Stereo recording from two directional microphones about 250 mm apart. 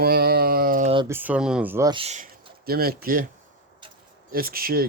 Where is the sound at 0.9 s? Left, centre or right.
Centre.